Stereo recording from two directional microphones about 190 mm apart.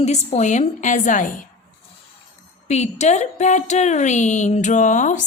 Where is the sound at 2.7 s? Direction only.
35° left (ahead or behind).